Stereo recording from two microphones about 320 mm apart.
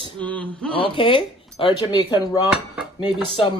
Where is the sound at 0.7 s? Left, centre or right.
Centre.